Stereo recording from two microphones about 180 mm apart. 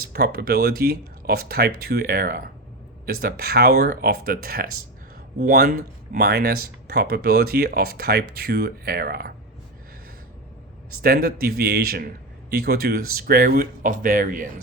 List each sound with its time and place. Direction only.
0.1 s speech: 60° right (ahead or behind)
11.0 s speech: 55° right (ahead or behind)